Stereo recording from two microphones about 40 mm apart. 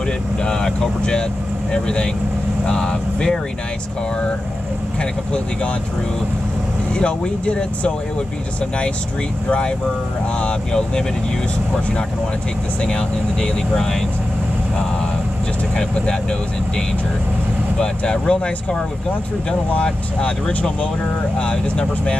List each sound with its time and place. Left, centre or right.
0.4 s speech: centre
6.9 s speech: left
9.5 s speech: left
12.8 s speech: left
15.7 s speech: left
17.7 s speech: centre
19.8 s speech: left